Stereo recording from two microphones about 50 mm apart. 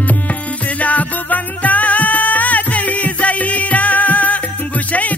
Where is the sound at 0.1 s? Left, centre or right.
Left.